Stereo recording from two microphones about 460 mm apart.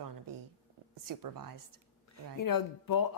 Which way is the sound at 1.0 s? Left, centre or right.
Right.